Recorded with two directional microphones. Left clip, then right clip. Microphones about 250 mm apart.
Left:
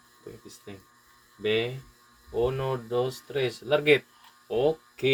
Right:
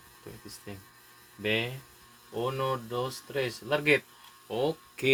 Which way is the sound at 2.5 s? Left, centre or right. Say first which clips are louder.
Left 3 dB; right.